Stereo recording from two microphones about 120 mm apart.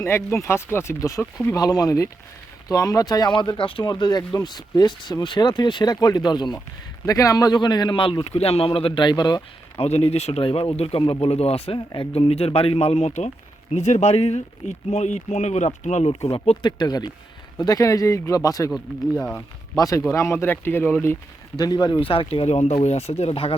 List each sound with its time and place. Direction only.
0.0 s speech: 20° left (ahead or behind)
1.5 s speech: 30° left (ahead or behind); by 3.8 s 45° left (ahead or behind)
3.8 s speech: 35° left (ahead or behind)
9.7 s speech: 60° left (ahead or behind)
16.6 s speech: 35° left (ahead or behind)
19.1 s speech: 10° left (ahead or behind)
19.7 s speech: 30° left (ahead or behind)
21.6 s speech: 35° left (ahead or behind); by 23.6 s 55° left (ahead or behind)